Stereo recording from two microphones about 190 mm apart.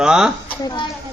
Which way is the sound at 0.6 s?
25° left (ahead or behind).